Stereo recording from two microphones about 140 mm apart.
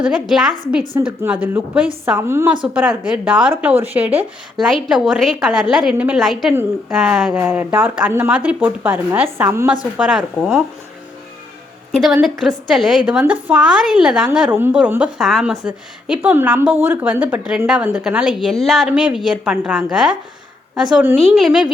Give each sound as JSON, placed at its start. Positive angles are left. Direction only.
{"t": 0.1, "sound": "a woman's voice", "side_deg": -5}
{"t": 11.9, "sound": "a woman's voice", "side_deg": 0}
{"t": 21.3, "sound": "a woman's voice", "side_deg": 0}